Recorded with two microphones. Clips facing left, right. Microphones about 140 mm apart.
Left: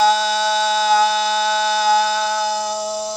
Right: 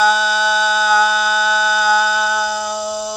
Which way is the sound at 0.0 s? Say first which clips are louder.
Even; 35° left (ahead or behind).